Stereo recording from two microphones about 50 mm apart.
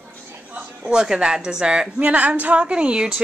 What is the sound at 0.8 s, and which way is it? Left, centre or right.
A woman's voice, centre.